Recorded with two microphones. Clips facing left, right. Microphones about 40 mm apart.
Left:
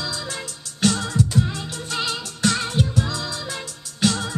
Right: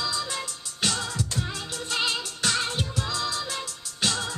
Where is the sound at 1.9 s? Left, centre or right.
Centre.